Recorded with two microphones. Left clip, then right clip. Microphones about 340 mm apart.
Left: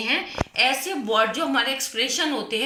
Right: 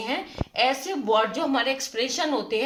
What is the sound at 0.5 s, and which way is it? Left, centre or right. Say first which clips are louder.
Speech: left 1 dB; right.